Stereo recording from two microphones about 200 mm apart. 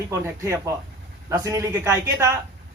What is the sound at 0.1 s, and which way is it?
A man's voice, 15° right (ahead or behind).